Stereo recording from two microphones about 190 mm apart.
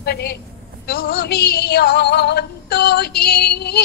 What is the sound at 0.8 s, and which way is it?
Female singing, 55° left (ahead or behind).